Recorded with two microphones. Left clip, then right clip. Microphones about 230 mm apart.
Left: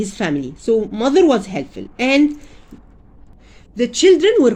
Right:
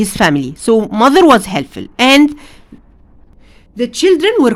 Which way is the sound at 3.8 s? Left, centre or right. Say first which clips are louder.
Right 1 dB; centre.